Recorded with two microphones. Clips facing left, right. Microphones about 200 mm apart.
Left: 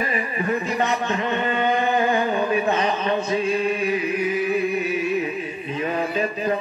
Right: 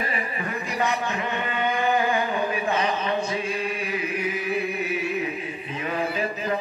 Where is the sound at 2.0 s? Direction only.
35° left (ahead or behind).